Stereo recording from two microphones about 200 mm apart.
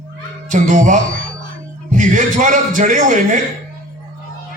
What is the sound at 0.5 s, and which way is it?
A man's voice, 40° right (ahead or behind).